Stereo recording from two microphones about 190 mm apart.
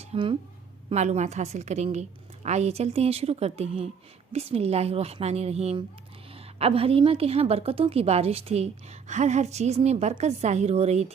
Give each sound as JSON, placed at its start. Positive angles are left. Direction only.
{"t": 0.0, "sound": "a woman's voice", "side_deg": -30}